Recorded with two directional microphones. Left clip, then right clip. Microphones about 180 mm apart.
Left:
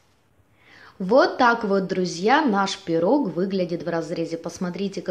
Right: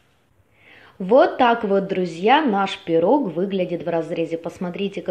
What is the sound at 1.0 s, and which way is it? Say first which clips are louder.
Speech: right 2 dB; centre (ahead or behind).